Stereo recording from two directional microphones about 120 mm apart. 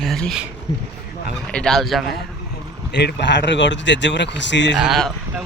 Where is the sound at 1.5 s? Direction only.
5° left (ahead or behind).